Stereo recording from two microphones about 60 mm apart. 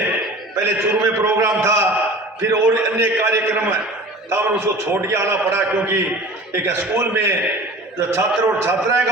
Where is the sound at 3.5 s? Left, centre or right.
Right.